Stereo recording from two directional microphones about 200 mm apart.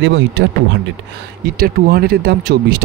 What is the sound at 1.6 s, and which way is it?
Speech, 50° right (ahead or behind).